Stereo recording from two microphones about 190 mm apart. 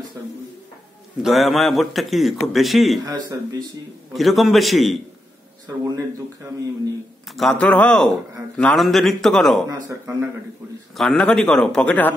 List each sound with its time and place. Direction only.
1.2 s a man's voice: centre (ahead or behind)
3.1 s speech: 20° right (ahead or behind)
4.1 s a man's voice: centre (ahead or behind)
5.9 s speech: 15° right (ahead or behind)
7.2 s a man's voice: centre (ahead or behind)
9.7 s speech: 15° right (ahead or behind)
11.0 s a man's voice: 5° left (ahead or behind)